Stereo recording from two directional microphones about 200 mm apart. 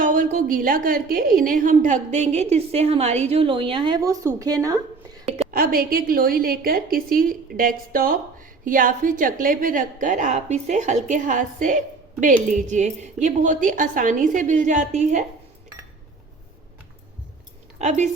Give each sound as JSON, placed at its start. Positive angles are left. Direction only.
{"t": 0.0, "sound": "a woman's voice", "side_deg": -40}
{"t": 5.5, "sound": "a woman's voice", "side_deg": -45}
{"t": 17.7, "sound": "speech", "side_deg": -35}